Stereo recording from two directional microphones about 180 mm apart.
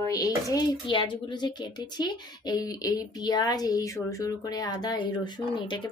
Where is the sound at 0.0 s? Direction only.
20° left (ahead or behind).